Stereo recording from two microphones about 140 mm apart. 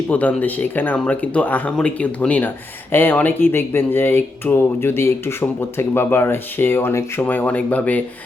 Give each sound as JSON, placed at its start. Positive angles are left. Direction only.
{"t": 0.1, "sound": "speech", "side_deg": 10}